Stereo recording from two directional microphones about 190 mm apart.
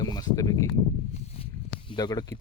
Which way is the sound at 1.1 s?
30° left (ahead or behind).